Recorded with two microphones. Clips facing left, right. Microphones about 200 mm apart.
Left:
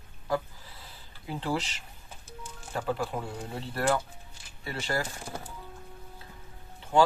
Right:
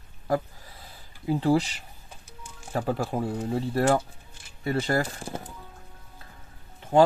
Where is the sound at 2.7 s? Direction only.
40° right (ahead or behind).